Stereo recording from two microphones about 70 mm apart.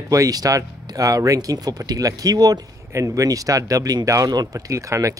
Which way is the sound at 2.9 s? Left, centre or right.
Right.